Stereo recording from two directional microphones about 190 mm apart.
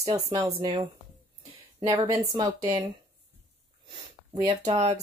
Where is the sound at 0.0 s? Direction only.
35° right (ahead or behind).